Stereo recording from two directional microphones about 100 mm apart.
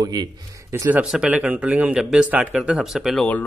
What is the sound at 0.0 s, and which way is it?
Speech, 40° right (ahead or behind).